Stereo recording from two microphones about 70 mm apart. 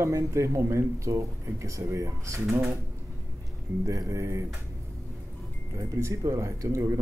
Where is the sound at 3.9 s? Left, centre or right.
Right.